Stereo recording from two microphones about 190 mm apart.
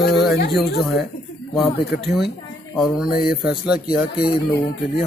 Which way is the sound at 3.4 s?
5° right (ahead or behind).